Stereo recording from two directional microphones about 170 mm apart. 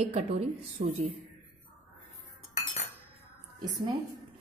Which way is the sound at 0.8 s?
50° right (ahead or behind).